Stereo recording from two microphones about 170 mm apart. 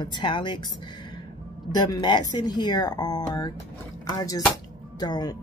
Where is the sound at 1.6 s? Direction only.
25° left (ahead or behind).